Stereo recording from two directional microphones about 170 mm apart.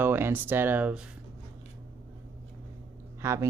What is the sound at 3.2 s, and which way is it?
Speech, 15° right (ahead or behind).